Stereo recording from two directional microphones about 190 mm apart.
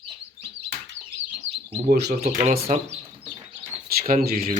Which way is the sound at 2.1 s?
40° right (ahead or behind).